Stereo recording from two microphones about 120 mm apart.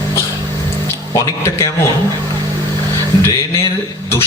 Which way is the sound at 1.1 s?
25° left (ahead or behind).